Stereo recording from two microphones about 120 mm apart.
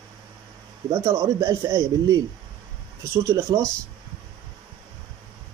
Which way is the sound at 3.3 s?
25° right (ahead or behind).